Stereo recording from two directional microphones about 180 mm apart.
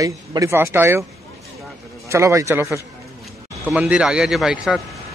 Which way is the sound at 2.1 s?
15° right (ahead or behind).